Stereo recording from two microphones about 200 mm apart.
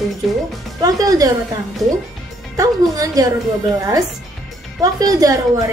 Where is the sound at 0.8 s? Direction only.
15° right (ahead or behind).